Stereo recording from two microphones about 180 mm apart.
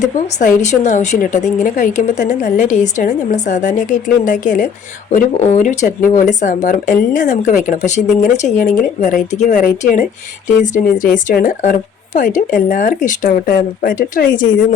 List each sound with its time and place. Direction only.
0.0 s speech: 45° left (ahead or behind)